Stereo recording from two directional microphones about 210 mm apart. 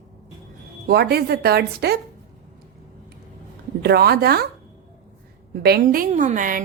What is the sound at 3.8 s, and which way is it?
Speech, 50° right (ahead or behind).